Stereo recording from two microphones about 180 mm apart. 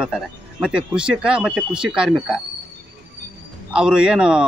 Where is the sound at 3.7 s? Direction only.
5° right (ahead or behind).